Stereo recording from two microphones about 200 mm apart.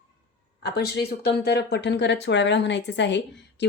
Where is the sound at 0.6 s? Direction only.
55° left (ahead or behind).